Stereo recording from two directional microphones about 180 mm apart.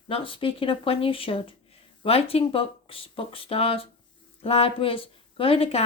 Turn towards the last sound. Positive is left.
turn(degrees=30)  # may be behind; listen again after turning